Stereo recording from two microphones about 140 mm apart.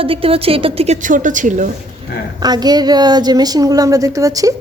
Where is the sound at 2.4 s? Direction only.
30° right (ahead or behind).